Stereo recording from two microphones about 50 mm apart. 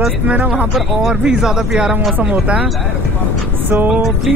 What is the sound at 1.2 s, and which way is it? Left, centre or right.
Speech, centre.